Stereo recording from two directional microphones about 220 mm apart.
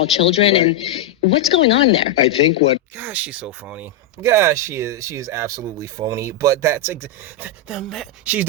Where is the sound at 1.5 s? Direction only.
55° left (ahead or behind).